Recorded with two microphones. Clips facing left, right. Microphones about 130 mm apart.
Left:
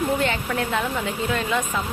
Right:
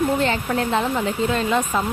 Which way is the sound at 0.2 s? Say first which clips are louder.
Right 3 dB; 30° right (ahead or behind).